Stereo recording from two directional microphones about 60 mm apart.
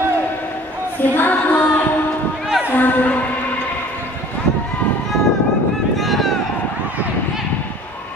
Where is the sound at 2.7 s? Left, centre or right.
Left.